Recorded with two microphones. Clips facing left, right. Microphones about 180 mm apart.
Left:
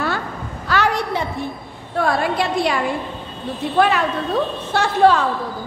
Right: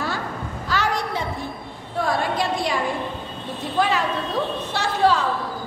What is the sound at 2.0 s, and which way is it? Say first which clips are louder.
Speech: left 4 dB; 65° left (ahead or behind).